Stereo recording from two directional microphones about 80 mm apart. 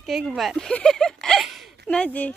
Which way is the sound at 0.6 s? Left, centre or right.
Centre.